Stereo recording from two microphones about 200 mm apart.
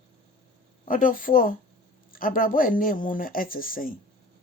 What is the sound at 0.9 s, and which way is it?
Speech, 45° left (ahead or behind).